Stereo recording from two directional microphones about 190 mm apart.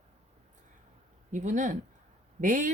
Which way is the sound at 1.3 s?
40° right (ahead or behind).